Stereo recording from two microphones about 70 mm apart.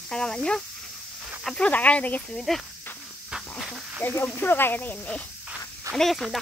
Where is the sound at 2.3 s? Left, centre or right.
Centre.